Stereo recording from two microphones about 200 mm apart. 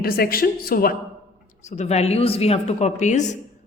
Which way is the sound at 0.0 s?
50° left (ahead or behind).